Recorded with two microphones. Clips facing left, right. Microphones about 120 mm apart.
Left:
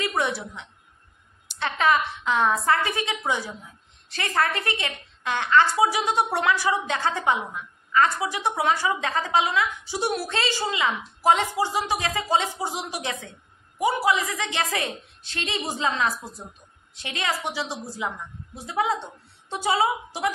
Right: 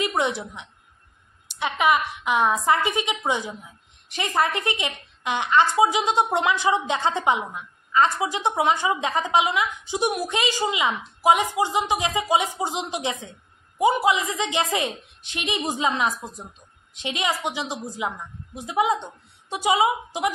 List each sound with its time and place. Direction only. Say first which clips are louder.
0.0 s a woman's voice: right 2 dB; 20° right (ahead or behind)